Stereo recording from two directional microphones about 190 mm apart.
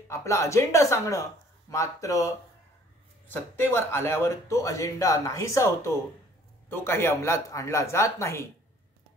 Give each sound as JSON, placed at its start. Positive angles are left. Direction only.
{"t": 0.1, "sound": "speech", "side_deg": 15}